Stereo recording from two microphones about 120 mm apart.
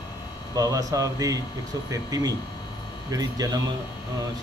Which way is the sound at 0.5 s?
30° right (ahead or behind).